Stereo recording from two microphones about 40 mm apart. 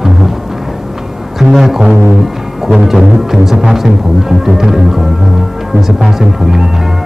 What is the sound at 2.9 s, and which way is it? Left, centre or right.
Music, centre.